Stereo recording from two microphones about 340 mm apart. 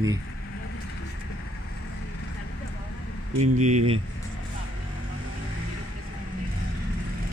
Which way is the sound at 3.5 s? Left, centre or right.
Right.